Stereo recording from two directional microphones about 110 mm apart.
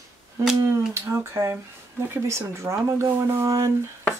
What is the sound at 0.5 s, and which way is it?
Speech, 25° right (ahead or behind).